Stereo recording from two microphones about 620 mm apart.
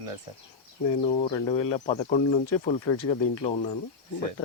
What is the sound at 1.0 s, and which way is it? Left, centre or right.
Speech, centre.